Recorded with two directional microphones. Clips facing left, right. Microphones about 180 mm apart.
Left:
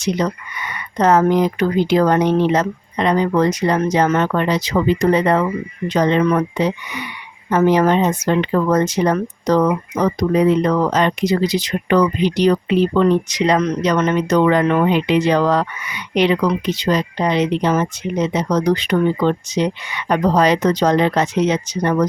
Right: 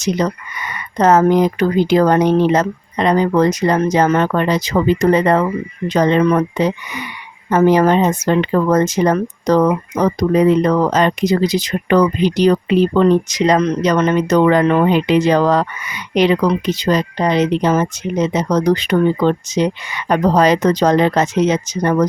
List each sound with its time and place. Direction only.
0.0 s speech: 40° right (ahead or behind)